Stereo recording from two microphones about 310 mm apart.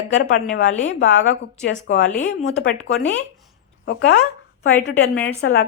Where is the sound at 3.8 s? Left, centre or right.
Left.